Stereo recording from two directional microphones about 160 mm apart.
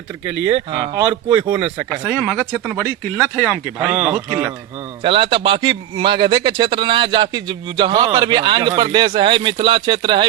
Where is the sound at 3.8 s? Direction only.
5° right (ahead or behind).